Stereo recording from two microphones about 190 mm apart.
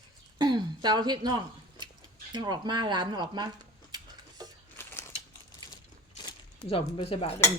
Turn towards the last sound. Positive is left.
turn(degrees=30)  # may be behind; listen again after turning